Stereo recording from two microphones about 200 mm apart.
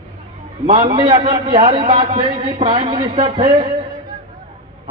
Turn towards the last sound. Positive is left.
turn(degrees=-25)  # may be behind; listen again after turning